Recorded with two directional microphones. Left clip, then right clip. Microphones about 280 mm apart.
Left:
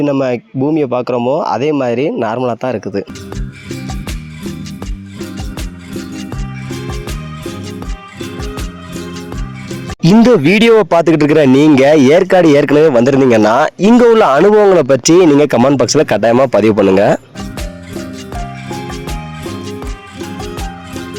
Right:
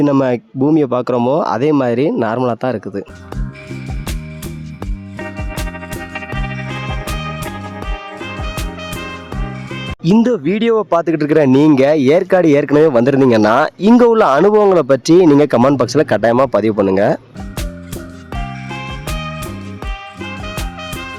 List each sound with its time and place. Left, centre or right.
0.0 s speech: centre
10.0 s speech: centre